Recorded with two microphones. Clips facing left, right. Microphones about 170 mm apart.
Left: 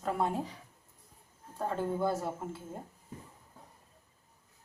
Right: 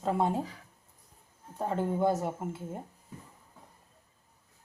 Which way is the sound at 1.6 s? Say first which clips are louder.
Right 3 dB; 20° right (ahead or behind).